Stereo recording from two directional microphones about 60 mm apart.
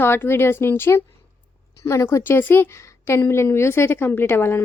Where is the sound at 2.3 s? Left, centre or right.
Left.